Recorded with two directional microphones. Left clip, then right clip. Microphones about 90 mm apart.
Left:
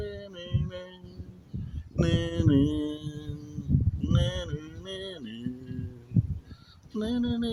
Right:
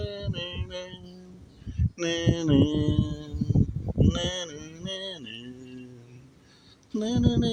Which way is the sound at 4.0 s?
20° left (ahead or behind).